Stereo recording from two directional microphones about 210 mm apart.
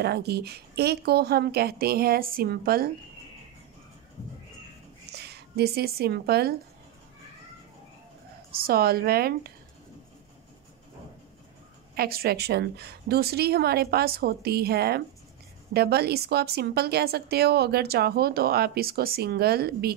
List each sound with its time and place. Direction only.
0.0 s a woman's voice: 50° right (ahead or behind)
5.1 s speech: 50° right (ahead or behind)
8.5 s a woman's voice: 45° right (ahead or behind)
11.9 s a woman's voice: 45° right (ahead or behind)